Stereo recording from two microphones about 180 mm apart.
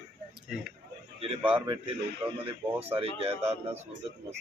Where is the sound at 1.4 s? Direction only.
10° right (ahead or behind).